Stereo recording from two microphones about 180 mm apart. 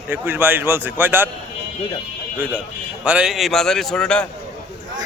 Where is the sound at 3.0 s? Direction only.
5° right (ahead or behind).